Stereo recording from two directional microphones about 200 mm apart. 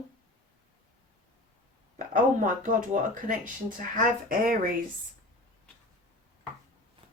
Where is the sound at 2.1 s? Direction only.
40° right (ahead or behind).